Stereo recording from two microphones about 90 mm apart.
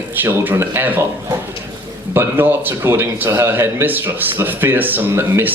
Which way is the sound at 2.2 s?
25° right (ahead or behind).